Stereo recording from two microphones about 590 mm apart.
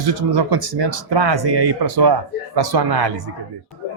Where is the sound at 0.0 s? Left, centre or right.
Right.